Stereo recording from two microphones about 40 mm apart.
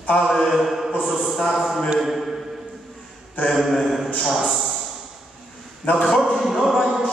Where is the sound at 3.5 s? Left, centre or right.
Centre.